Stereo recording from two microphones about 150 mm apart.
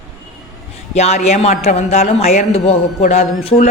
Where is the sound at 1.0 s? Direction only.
45° left (ahead or behind).